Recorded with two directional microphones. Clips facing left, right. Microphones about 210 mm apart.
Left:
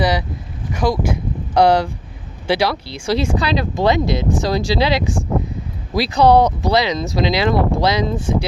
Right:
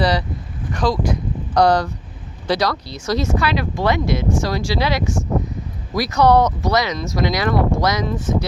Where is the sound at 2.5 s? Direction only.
25° left (ahead or behind).